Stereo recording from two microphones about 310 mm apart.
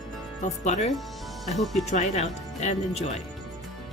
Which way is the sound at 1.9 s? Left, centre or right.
Left.